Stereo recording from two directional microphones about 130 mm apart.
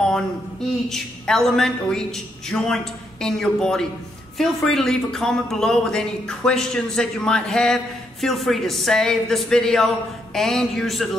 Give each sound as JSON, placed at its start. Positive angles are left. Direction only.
{"t": 0.8, "sound": "a man's voice", "side_deg": 5}